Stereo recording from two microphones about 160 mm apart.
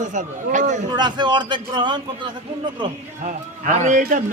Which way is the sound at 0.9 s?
25° right (ahead or behind).